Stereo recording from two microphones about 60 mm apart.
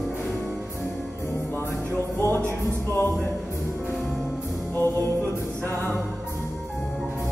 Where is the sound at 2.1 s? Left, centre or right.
Left.